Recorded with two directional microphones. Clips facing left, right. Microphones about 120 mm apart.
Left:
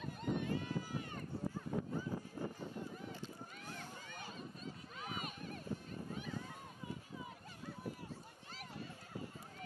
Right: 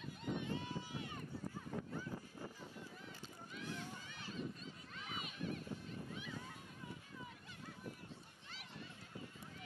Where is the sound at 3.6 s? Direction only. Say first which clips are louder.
Right 7 dB; 45° left (ahead or behind).